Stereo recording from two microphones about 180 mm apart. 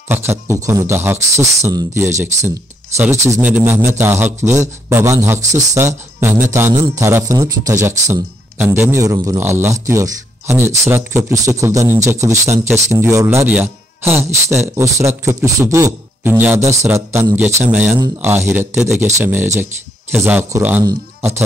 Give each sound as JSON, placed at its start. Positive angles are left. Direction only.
{"t": 0.1, "sound": "speech", "side_deg": -15}